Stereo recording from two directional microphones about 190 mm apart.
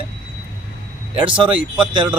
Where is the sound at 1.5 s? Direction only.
5° right (ahead or behind).